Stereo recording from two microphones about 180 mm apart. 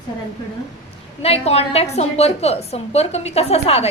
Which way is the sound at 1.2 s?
35° left (ahead or behind).